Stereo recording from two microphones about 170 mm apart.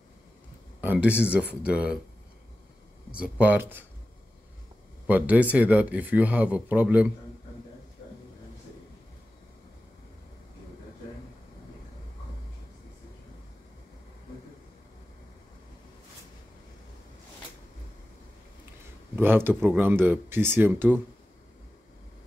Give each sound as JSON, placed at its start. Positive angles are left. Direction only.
{"t": 0.7, "sound": "speech", "side_deg": -10}
{"t": 3.1, "sound": "speech", "side_deg": -5}
{"t": 5.0, "sound": "speech", "side_deg": -10}
{"t": 19.1, "sound": "speech", "side_deg": -10}